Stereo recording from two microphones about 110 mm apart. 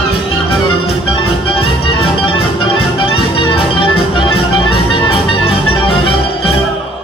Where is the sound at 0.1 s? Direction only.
60° left (ahead or behind).